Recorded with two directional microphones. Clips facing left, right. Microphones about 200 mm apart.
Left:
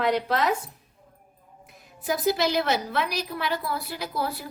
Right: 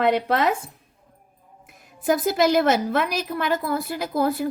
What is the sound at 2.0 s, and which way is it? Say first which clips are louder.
A woman's voice: right 4 dB; 50° right (ahead or behind).